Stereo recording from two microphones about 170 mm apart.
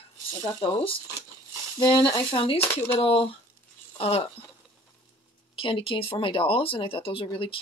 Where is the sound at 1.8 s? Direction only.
25° left (ahead or behind).